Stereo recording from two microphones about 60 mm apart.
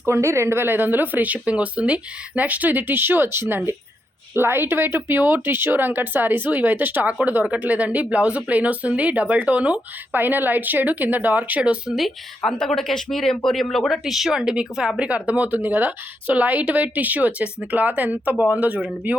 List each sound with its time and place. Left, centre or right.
0.0 s a woman's voice: right
11.9 s speech: centre
12.4 s speech: centre